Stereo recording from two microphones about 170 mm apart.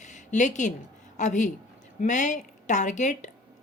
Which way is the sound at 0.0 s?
45° left (ahead or behind).